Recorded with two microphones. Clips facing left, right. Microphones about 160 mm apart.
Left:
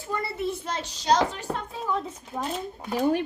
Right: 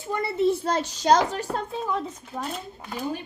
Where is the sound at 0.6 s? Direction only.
40° right (ahead or behind).